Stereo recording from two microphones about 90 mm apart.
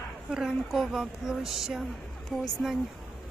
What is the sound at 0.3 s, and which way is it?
Speech, 5° right (ahead or behind).